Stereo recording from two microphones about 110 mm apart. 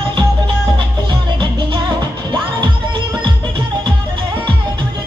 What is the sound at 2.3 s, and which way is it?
Music, 50° right (ahead or behind).